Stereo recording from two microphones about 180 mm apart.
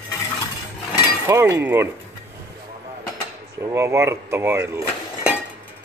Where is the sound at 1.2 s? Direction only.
15° right (ahead or behind).